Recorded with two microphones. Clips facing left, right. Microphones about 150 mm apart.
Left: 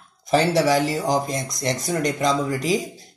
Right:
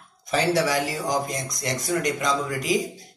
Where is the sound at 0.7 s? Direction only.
30° left (ahead or behind).